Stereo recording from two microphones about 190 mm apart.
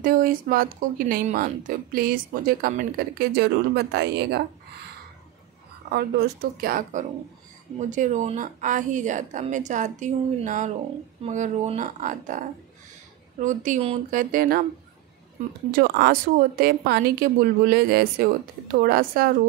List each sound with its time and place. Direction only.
0.0 s a woman's voice: 45° right (ahead or behind)
5.9 s a woman's voice: 55° right (ahead or behind); by 14.2 s 35° right (ahead or behind)
14.3 s a woman's voice: 50° right (ahead or behind)
15.7 s a woman's voice: 50° right (ahead or behind)